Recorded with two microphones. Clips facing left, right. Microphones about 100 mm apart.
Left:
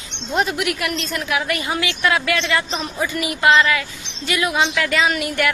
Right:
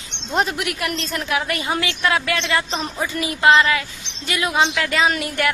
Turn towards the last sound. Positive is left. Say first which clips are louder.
# even
turn(degrees=-30)  # may be behind; listen again after turning